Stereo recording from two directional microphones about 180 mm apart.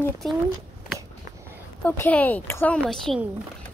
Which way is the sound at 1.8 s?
10° left (ahead or behind).